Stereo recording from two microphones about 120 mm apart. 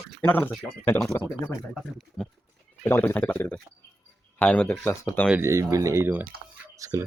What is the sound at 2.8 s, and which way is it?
Speech, 15° left (ahead or behind).